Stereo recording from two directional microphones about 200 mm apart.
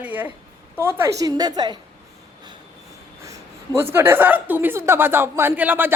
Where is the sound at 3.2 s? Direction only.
15° right (ahead or behind).